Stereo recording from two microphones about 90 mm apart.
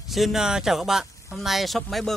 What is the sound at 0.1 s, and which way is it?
Speech, 5° right (ahead or behind).